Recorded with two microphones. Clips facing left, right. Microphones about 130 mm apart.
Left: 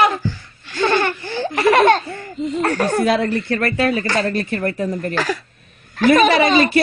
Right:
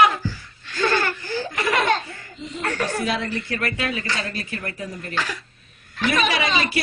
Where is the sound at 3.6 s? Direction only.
45° left (ahead or behind).